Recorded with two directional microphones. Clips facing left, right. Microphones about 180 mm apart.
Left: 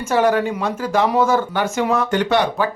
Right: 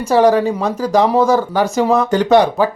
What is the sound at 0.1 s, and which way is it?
Speech, 35° right (ahead or behind).